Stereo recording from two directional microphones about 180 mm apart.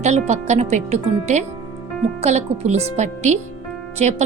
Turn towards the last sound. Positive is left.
turn(degrees=-40)  # may be behind; listen again after turning